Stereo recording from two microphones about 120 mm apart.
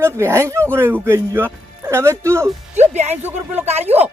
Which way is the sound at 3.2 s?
15° right (ahead or behind).